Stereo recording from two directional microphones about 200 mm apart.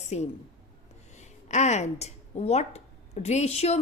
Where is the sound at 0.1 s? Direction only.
35° left (ahead or behind).